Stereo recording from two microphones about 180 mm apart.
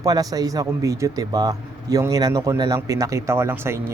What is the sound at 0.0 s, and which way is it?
A man's voice, 20° right (ahead or behind).